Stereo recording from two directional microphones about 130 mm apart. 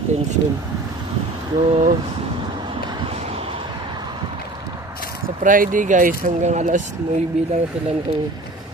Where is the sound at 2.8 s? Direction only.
45° right (ahead or behind).